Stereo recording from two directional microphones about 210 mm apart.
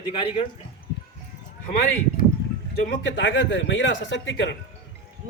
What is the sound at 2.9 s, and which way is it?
Speech, 60° left (ahead or behind).